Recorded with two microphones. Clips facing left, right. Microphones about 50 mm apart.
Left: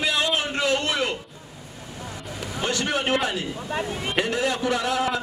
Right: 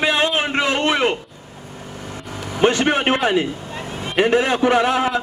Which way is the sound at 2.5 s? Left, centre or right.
Right.